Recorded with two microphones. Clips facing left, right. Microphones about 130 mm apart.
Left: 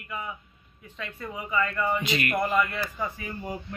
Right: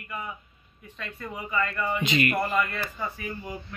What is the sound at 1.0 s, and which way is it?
Speech, 15° left (ahead or behind).